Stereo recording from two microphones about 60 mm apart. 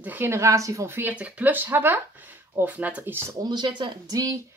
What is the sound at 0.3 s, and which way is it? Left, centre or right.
Speech, right.